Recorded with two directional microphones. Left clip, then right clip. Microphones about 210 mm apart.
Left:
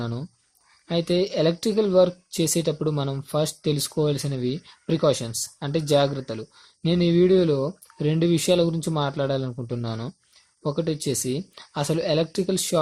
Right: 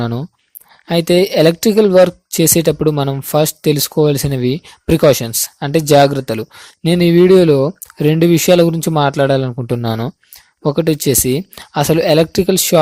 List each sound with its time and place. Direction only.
0.0 s speech: 35° right (ahead or behind)